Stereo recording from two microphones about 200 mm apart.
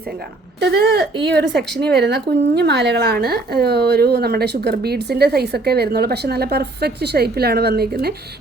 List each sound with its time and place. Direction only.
0.6 s speech: 55° right (ahead or behind)